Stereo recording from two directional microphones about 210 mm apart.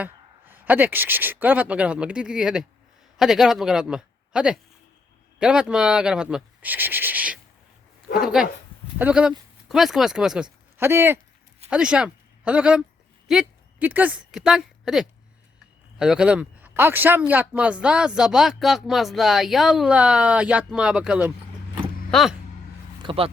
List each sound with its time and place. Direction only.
0.0 s a woman's voice: 10° right (ahead or behind)
23.0 s speech: 25° right (ahead or behind)